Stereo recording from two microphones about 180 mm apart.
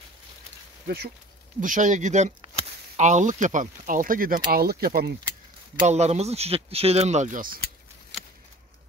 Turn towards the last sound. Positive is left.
turn(degrees=-50)  # may be behind; listen again after turning